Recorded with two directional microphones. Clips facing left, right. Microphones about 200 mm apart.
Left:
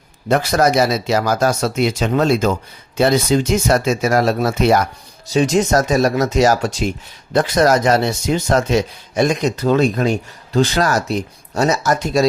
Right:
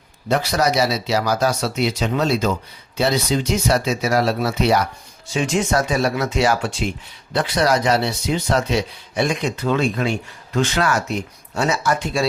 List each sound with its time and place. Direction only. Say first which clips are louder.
0.3 s speech: left 4 dB; 50° left (ahead or behind)